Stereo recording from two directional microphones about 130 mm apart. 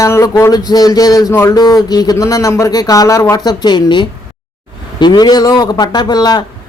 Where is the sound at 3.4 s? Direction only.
35° left (ahead or behind).